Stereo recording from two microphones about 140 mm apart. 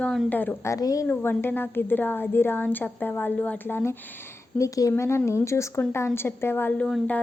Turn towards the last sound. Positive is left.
turn(degrees=5)  # may be behind; listen again after turning